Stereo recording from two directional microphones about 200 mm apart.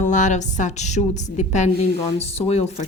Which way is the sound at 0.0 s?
40° left (ahead or behind).